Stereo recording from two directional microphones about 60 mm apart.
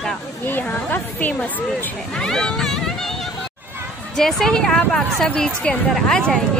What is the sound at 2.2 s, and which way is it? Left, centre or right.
Speech, centre.